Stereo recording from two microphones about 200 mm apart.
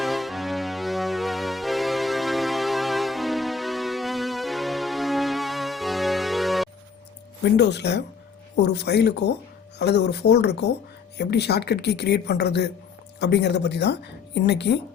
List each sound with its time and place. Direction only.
0.0 s music: centre (ahead or behind)
7.5 s a woman's voice: 60° left (ahead or behind)